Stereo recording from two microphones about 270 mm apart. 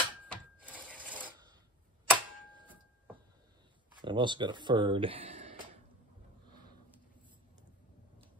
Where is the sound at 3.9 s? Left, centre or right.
Centre.